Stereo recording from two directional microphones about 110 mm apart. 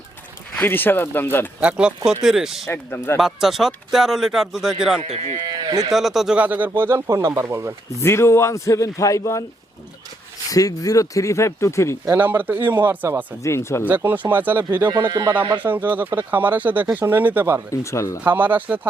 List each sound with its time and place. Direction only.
0.5 s speech: 20° left (ahead or behind)
1.6 s speech: 10° right (ahead or behind)
2.6 s speech: 20° left (ahead or behind)
3.2 s speech: 5° right (ahead or behind)
5.0 s speech: 80° right
5.5 s livestock: 35° right (ahead or behind)
5.9 s speech: centre (ahead or behind); by 7.7 s 25° right (ahead or behind)
8.0 s speech: 25° left (ahead or behind)
10.5 s speech: 30° left (ahead or behind)
12.0 s speech: 20° right (ahead or behind)
13.4 s speech: 25° left (ahead or behind)
13.8 s speech: 15° right (ahead or behind)
17.7 s speech: 25° left (ahead or behind)
18.2 s speech: 15° right (ahead or behind)